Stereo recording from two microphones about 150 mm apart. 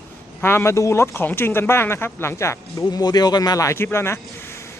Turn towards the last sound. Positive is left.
turn(degrees=15)  # may be behind; listen again after turning